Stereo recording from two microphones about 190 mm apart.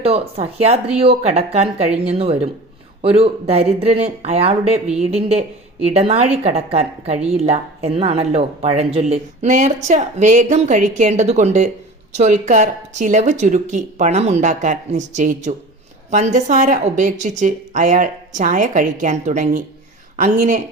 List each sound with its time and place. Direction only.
0.0 s speech: 30° right (ahead or behind)